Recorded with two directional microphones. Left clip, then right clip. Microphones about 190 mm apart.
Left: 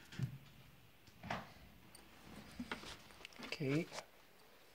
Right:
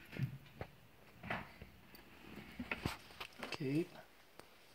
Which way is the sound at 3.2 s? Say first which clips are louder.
Left 1 dB; 40° left (ahead or behind).